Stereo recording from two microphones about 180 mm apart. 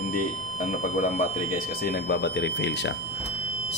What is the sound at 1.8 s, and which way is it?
Speech, 65° left (ahead or behind).